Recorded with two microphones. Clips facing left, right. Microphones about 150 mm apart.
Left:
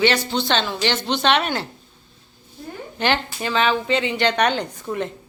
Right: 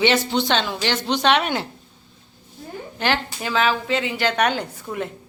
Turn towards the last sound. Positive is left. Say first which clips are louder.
# left 2 dB
turn(degrees=-5)  # may be behind; listen again after turning